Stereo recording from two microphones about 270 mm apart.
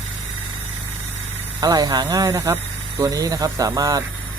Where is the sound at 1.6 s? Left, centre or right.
Centre.